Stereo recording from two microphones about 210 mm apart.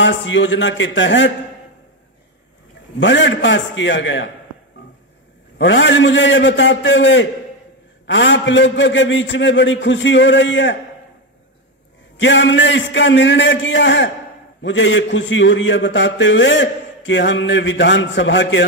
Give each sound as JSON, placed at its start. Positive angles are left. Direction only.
{"t": 0.0, "sound": "a man's voice", "side_deg": 65}
{"t": 3.0, "sound": "a man's voice", "side_deg": 60}
{"t": 5.6, "sound": "a man's voice", "side_deg": 60}
{"t": 12.2, "sound": "a man's voice", "side_deg": 60}